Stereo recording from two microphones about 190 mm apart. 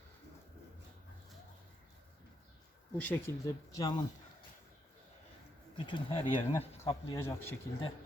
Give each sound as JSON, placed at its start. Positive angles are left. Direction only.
{"t": 3.0, "sound": "speech", "side_deg": 10}
{"t": 3.8, "sound": "speech", "side_deg": 20}
{"t": 5.7, "sound": "speech", "side_deg": 25}